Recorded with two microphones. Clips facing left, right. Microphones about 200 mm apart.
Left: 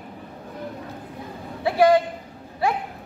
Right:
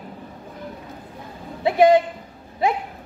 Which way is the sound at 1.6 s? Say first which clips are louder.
Right 2 dB; 20° right (ahead or behind).